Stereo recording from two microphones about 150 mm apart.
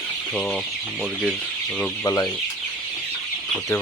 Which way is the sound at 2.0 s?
20° left (ahead or behind).